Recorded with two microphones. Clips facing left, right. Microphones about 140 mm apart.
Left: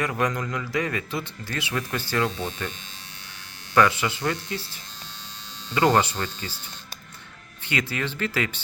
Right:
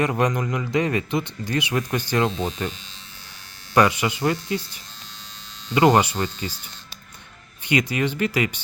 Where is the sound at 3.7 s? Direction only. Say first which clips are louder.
Right 2 dB; 15° right (ahead or behind).